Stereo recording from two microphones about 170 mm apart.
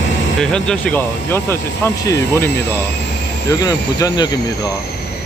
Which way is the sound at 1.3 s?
15° left (ahead or behind).